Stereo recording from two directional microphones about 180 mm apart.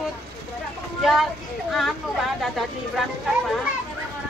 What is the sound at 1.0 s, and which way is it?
A woman's voice, centre (ahead or behind).